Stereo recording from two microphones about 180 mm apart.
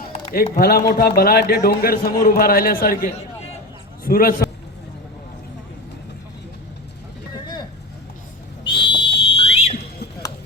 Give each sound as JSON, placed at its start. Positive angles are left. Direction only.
{"t": 0.3, "sound": "a man's voice", "side_deg": 60}
{"t": 8.9, "sound": "fire alarm", "side_deg": 30}